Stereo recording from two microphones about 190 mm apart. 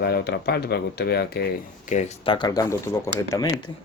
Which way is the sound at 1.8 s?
40° left (ahead or behind).